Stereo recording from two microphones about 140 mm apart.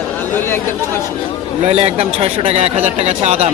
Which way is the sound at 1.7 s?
45° right (ahead or behind).